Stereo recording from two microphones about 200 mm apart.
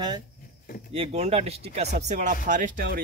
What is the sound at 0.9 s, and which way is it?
Speech, 30° right (ahead or behind).